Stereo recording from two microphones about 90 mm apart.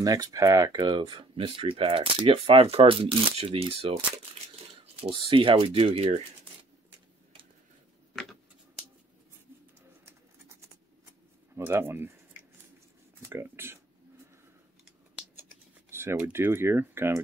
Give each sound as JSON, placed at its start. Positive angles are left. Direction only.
{"t": 0.0, "sound": "speech", "side_deg": -45}
{"t": 1.3, "sound": "speech", "side_deg": -90}
{"t": 5.0, "sound": "speech", "side_deg": -75}
{"t": 8.2, "sound": "a sound", "side_deg": 0}
{"t": 11.5, "sound": "speech", "side_deg": -30}
{"t": 13.2, "sound": "a sound", "side_deg": -30}
{"t": 15.3, "sound": "computer keyboard", "side_deg": -25}